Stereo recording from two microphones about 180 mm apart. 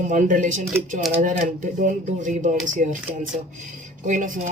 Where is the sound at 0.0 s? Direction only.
45° right (ahead or behind).